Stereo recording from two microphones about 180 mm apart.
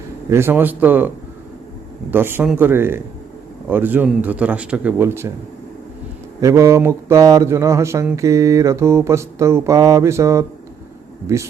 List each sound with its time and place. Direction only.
0.3 s speech: 15° right (ahead or behind)
6.4 s speech: 15° right (ahead or behind)